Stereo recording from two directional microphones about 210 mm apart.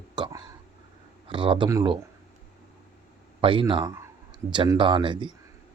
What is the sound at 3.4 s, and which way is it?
Speech, 25° right (ahead or behind).